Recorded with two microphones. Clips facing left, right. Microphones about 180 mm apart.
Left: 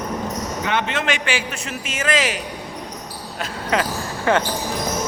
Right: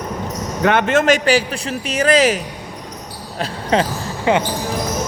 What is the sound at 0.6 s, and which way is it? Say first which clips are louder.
A man's voice: right 10 dB; 55° right (ahead or behind).